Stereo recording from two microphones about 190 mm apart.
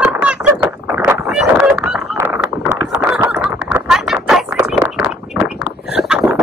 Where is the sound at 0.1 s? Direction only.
10° right (ahead or behind).